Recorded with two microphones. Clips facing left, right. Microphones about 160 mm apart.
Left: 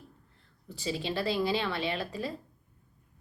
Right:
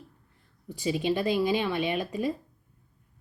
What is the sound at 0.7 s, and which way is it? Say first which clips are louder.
A woman's voice: right 6 dB; 15° right (ahead or behind).